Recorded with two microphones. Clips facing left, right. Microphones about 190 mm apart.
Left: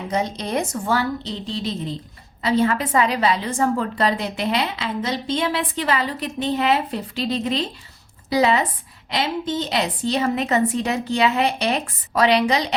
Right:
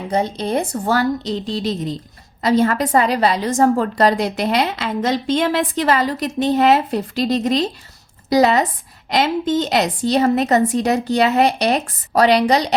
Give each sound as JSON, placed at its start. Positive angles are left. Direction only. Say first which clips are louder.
{"t": 0.1, "sound": "a woman's voice", "louder": "right 4 dB", "side_deg": -30}